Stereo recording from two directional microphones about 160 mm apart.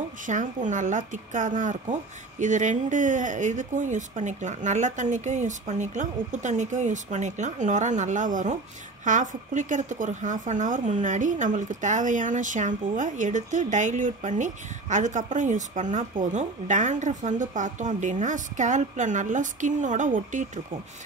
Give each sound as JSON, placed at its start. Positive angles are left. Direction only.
{"t": 0.3, "sound": "speech", "side_deg": -50}